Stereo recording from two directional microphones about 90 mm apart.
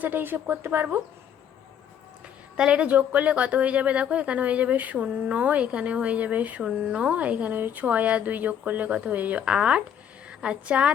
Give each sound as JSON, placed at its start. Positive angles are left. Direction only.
{"t": 0.0, "sound": "speech", "side_deg": -20}
{"t": 2.6, "sound": "a woman's voice", "side_deg": -10}